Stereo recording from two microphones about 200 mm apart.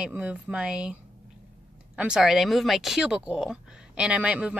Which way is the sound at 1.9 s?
5° right (ahead or behind).